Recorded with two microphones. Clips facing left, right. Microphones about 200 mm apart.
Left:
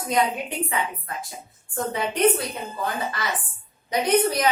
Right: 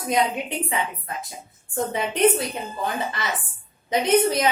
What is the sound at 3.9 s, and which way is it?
Speech, 25° right (ahead or behind).